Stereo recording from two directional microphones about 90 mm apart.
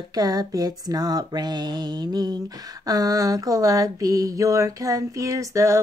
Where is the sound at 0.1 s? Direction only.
45° right (ahead or behind).